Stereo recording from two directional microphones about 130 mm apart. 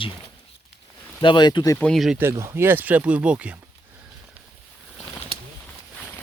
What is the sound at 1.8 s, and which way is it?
Speech, centre (ahead or behind).